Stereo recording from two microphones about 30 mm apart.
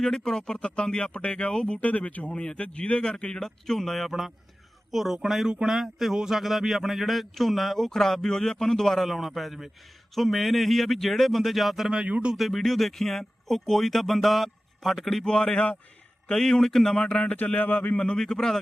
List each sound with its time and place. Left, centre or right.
0.0 s speech: centre; by 1.5 s left
1.8 s speech: left
2.2 s speech: left
3.0 s speech: left
3.4 s speech: centre
9.0 s speech: centre
15.2 s a man's voice: left
17.3 s speech: left
18.2 s speech: centre